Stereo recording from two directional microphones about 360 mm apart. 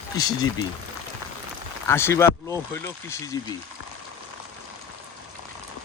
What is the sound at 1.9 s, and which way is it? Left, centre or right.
Speech, centre.